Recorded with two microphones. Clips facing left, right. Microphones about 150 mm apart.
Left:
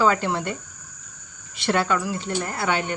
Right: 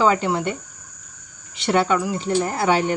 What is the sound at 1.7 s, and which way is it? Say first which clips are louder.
Speech: right 3 dB; 20° right (ahead or behind).